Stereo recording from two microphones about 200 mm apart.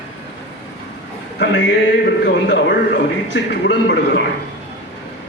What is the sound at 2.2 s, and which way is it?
A man's voice, 60° left (ahead or behind).